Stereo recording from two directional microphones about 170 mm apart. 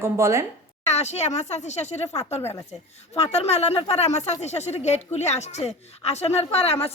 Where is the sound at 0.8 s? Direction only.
40° left (ahead or behind).